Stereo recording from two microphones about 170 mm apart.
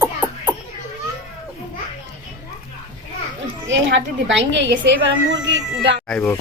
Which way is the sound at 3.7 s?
90° right.